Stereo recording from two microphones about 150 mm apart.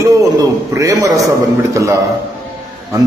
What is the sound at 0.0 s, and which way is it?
A man's voice, 20° right (ahead or behind).